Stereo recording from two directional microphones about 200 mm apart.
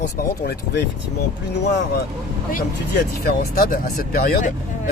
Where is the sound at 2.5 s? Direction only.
45° left (ahead or behind).